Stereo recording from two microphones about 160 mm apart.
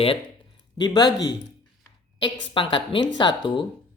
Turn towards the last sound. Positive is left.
turn(degrees=30)  # may be behind; listen again after turning